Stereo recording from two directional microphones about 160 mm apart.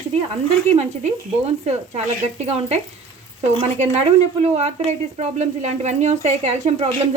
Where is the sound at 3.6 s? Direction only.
40° right (ahead or behind).